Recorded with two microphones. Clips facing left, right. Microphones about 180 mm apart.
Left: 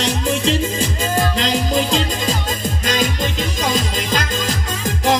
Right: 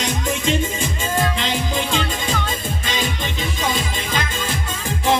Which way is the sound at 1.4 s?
40° left (ahead or behind).